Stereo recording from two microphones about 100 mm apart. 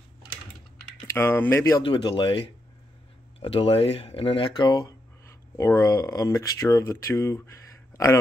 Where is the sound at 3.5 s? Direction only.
75° left (ahead or behind); by 4.9 s 45° left (ahead or behind).